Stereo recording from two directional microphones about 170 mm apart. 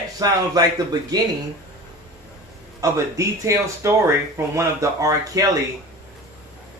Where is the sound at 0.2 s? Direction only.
20° right (ahead or behind).